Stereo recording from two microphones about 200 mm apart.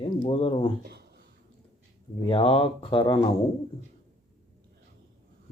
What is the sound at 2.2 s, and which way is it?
Speech, 25° left (ahead or behind).